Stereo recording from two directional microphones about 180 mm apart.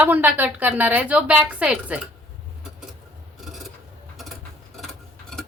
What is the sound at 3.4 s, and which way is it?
Filing, centre (ahead or behind).